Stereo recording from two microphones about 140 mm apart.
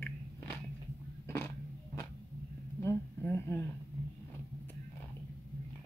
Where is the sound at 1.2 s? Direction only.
15° left (ahead or behind).